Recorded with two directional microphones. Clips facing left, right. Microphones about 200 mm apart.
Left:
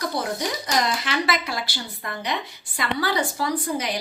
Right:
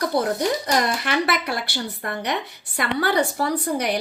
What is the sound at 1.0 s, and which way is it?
A woman's voice, 60° right (ahead or behind).